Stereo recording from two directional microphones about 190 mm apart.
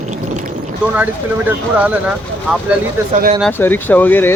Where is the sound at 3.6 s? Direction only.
10° left (ahead or behind).